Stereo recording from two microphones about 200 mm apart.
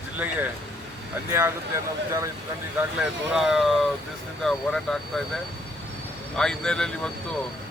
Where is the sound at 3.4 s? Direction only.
Centre (ahead or behind).